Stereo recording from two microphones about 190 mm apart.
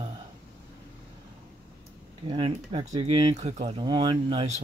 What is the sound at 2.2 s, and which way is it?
Speech, 25° right (ahead or behind).